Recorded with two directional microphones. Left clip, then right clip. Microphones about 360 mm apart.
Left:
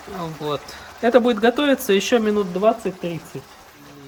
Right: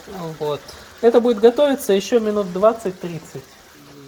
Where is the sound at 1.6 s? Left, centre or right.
Centre.